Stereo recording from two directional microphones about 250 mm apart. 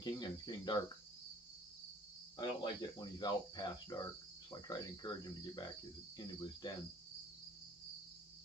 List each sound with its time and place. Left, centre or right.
0.0 s speech: centre
2.3 s speech: centre